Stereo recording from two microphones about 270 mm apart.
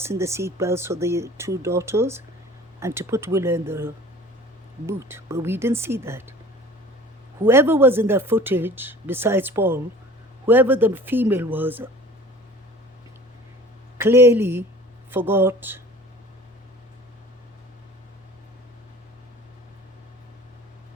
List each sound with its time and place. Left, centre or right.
0.0 s speech: centre
7.4 s speech: centre
14.0 s speech: centre